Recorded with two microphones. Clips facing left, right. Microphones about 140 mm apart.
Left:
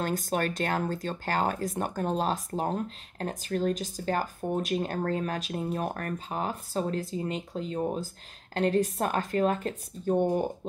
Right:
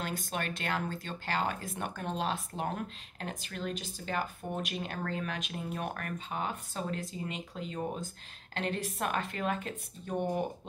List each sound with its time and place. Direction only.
0.0 s speech: 40° left (ahead or behind)